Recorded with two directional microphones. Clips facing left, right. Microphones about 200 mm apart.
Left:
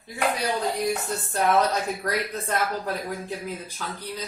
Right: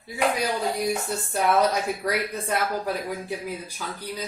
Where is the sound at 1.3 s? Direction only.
10° right (ahead or behind).